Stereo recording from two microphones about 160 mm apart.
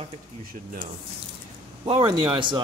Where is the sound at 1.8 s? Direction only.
35° right (ahead or behind).